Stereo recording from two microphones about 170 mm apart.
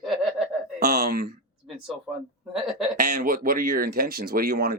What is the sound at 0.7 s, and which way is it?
Speech, 65° right (ahead or behind).